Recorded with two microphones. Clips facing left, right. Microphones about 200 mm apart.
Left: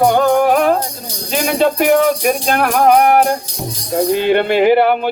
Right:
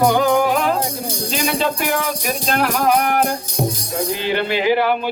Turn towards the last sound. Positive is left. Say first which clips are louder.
# left 6 dB
turn(degrees=55)  # may be behind; listen again after turning